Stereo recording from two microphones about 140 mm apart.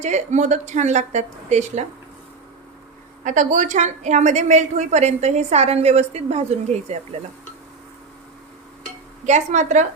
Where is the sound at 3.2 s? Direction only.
65° right (ahead or behind).